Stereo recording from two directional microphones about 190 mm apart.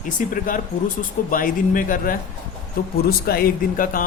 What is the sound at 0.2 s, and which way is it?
Speech, 45° left (ahead or behind).